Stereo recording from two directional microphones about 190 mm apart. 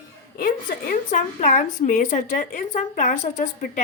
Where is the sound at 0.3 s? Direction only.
50° left (ahead or behind).